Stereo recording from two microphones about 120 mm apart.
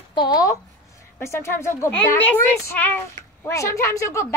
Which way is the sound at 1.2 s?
20° left (ahead or behind).